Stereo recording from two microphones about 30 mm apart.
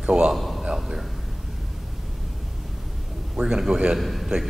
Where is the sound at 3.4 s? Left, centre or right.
Right.